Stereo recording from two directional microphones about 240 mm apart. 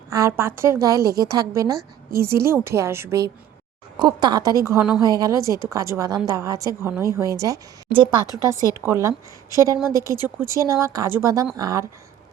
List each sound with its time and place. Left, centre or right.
0.1 s a woman's voice: centre
8.4 s a woman's voice: centre
8.7 s a woman's voice: centre